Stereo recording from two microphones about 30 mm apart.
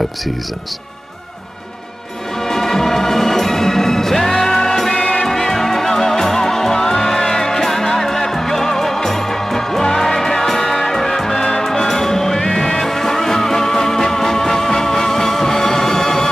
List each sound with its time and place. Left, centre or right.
2.4 s music: centre
4.9 s music: left
5.3 s music: centre